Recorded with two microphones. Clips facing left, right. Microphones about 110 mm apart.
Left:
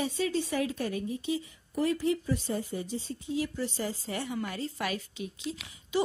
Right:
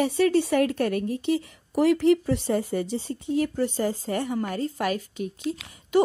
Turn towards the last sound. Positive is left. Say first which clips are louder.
# right 9 dB
turn(degrees=-50)  # may be behind; listen again after turning